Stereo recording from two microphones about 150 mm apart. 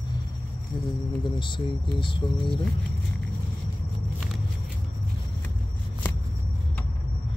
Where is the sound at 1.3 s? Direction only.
35° left (ahead or behind).